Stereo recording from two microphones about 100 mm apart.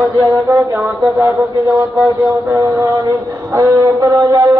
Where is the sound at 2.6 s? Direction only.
35° right (ahead or behind).